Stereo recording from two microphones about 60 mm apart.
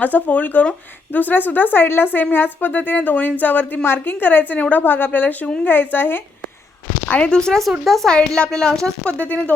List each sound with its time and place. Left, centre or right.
0.0 s speech: left
7.3 s a woman's voice: centre
9.2 s speech: left